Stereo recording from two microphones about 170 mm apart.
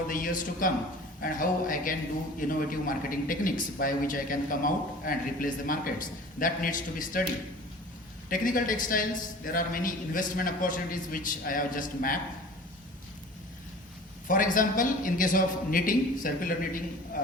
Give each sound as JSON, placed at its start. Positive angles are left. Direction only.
{"t": 0.1, "sound": "a man's voice", "side_deg": 55}
{"t": 8.3, "sound": "a man's voice", "side_deg": 55}
{"t": 14.3, "sound": "a man's voice", "side_deg": 50}